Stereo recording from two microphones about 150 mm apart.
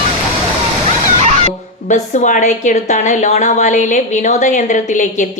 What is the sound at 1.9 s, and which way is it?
A woman's voice, 55° left (ahead or behind).